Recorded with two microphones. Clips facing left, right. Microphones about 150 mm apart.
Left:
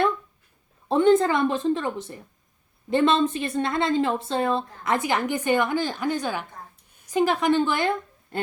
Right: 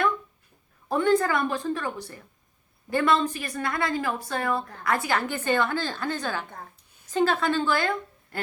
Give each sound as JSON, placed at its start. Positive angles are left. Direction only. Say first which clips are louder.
{"t": 0.9, "sound": "a woman's voice", "louder": "left 4 dB", "side_deg": 25}